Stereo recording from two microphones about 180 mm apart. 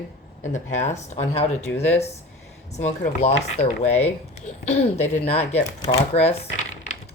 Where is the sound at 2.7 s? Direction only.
40° left (ahead or behind).